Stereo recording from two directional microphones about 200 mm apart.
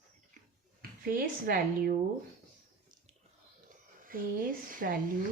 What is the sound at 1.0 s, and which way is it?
Speech, 50° right (ahead or behind).